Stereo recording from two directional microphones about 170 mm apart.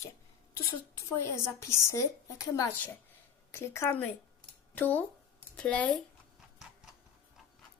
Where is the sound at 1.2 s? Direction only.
15° left (ahead or behind).